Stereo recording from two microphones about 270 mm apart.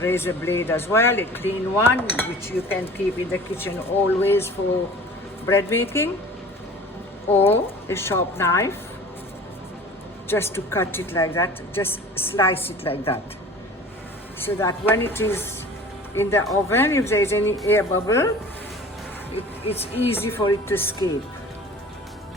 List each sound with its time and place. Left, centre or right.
0.0 s speech: centre
7.4 s speech: centre
10.2 s speech: centre
12.8 s speech: left
14.3 s speech: centre
19.6 s speech: left
20.1 s speech: centre